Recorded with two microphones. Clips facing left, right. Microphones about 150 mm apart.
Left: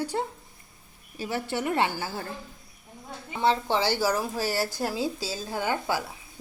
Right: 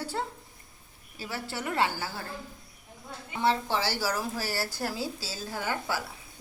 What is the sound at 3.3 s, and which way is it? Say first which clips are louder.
A woman's voice: left 3 dB; 20° left (ahead or behind).